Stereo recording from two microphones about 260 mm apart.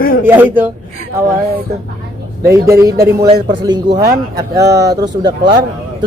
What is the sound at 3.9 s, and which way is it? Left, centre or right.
Speech, right.